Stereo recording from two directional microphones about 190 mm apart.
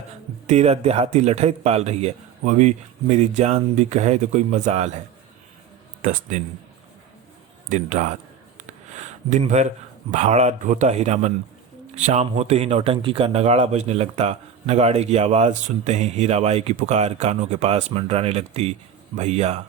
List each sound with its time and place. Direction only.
0.4 s speech: 35° right (ahead or behind)
6.0 s speech: 40° right (ahead or behind)
7.7 s speech: 40° right (ahead or behind)
9.3 s speech: 35° right (ahead or behind)